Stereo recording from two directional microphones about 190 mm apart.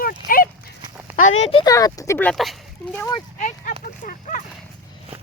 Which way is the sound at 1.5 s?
30° left (ahead or behind).